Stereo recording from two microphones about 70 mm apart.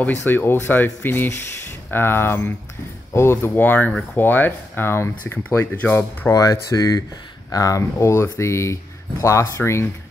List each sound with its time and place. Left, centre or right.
0.0 s speech: left
6.3 s speech: left